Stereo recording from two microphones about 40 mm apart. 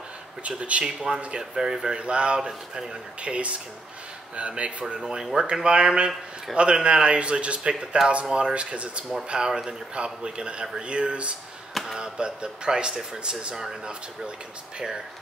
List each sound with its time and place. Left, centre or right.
0.4 s speech: right
1.0 s speech: centre
2.0 s speech: right
3.2 s speech: right
5.0 s speech: centre